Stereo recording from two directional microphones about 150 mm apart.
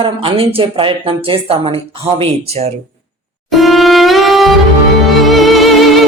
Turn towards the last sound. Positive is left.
turn(degrees=0)  # may be behind; listen again after turning